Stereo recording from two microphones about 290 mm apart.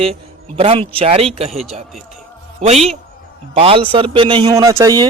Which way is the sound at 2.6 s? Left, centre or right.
Right.